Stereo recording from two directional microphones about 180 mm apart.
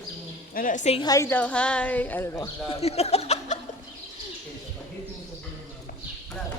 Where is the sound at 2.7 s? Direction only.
35° left (ahead or behind).